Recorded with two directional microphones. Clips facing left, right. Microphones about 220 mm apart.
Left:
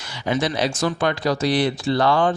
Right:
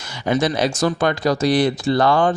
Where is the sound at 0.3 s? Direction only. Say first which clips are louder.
Right 3 dB; 45° right (ahead or behind).